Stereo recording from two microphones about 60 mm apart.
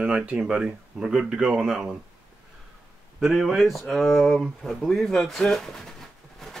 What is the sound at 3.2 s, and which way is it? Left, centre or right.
Speech, centre.